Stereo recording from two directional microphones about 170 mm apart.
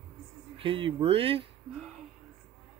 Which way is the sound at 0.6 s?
30° right (ahead or behind).